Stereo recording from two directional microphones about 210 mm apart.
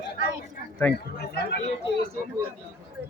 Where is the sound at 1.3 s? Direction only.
50° left (ahead or behind).